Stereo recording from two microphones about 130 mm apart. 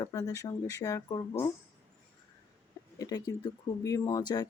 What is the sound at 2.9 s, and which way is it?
Speech, 30° left (ahead or behind).